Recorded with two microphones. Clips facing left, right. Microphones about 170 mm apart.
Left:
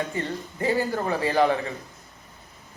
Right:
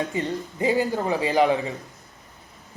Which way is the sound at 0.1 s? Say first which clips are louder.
Right 3 dB; 15° right (ahead or behind).